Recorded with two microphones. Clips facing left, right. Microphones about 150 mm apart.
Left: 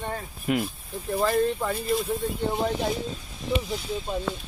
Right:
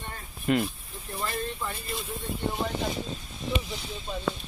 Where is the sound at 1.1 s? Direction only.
90° left.